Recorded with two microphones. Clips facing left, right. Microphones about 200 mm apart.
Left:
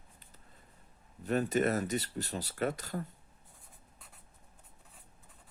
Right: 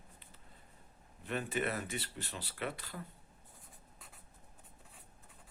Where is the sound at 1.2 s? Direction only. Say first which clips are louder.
Left 7 dB; 40° left (ahead or behind).